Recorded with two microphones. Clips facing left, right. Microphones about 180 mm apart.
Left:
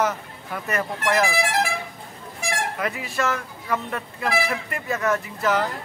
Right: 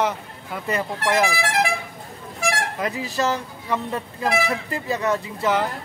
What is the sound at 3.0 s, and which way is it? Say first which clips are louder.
Speech: right 5 dB; 35° right (ahead or behind).